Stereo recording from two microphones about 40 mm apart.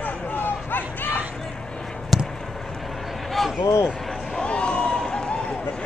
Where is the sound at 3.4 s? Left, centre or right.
Centre.